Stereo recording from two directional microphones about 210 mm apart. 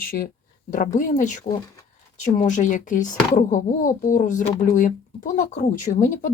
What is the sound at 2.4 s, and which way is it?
Speech, 35° left (ahead or behind).